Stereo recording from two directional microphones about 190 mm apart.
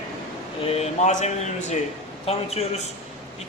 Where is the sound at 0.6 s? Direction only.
35° left (ahead or behind).